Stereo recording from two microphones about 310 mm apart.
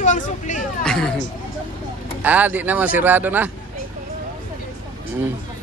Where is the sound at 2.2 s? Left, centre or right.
Centre.